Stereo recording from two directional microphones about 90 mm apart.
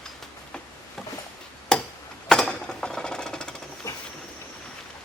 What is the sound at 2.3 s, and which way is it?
Sewing machine, 5° left (ahead or behind).